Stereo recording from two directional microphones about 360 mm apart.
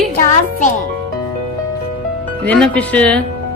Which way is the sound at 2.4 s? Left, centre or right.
Centre.